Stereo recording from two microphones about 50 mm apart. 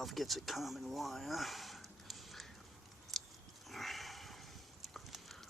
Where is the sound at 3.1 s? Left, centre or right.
Centre.